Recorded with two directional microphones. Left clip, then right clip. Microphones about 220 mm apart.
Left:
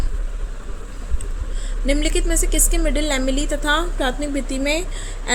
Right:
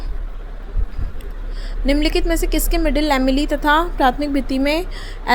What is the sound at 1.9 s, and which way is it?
A woman's voice, 25° right (ahead or behind).